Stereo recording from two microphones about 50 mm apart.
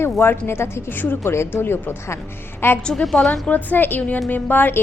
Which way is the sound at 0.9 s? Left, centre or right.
Left.